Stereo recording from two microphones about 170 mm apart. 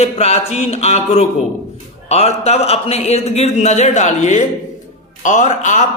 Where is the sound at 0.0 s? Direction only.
35° left (ahead or behind).